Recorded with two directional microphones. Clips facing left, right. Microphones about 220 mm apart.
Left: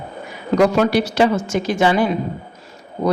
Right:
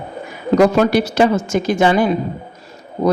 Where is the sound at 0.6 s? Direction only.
45° right (ahead or behind).